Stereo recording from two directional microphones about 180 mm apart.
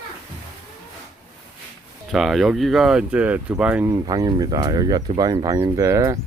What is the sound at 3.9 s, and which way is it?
Speech, 20° right (ahead or behind).